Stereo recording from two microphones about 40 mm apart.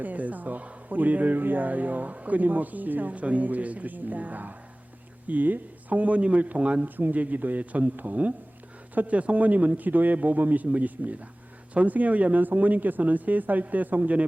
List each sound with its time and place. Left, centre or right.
0.0 s a man's voice: right
6.8 s a man's voice: right